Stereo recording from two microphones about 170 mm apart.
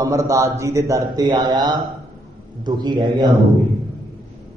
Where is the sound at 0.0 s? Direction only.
20° right (ahead or behind).